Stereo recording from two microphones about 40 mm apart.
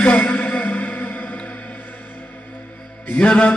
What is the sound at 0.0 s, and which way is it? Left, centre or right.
Music, left.